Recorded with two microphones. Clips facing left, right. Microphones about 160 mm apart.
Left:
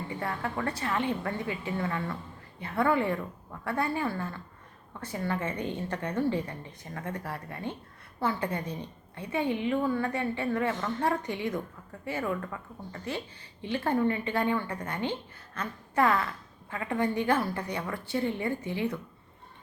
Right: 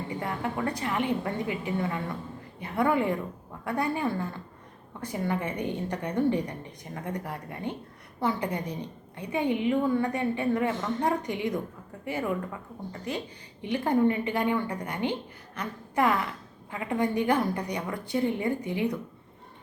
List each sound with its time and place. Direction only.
0.1 s a woman's voice: 15° right (ahead or behind)